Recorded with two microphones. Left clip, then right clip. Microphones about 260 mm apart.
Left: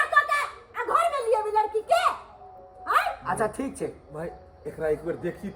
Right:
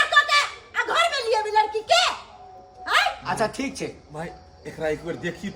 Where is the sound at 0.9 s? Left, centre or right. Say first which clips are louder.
Right 1 dB; right.